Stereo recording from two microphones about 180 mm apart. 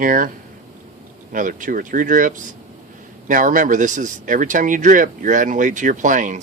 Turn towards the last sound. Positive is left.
turn(degrees=-45)  # may be behind; listen again after turning